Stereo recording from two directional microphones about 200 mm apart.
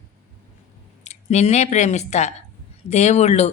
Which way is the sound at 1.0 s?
35° left (ahead or behind).